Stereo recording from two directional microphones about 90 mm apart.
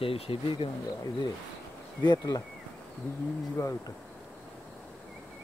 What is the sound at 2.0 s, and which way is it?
Speech, 50° left (ahead or behind).